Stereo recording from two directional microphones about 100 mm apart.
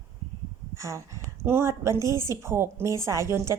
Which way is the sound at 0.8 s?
30° right (ahead or behind).